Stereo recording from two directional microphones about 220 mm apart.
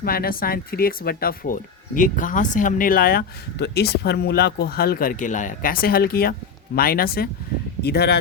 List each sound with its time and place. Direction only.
0.0 s speech: 45° left (ahead or behind)